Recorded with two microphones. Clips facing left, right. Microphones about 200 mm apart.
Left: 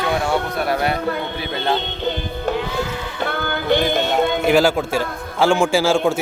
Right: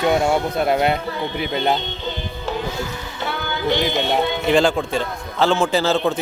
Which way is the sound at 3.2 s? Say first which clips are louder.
Left 2 dB; 55° left (ahead or behind).